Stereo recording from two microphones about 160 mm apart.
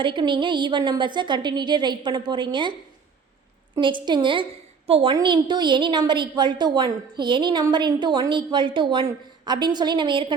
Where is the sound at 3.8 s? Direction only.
30° right (ahead or behind).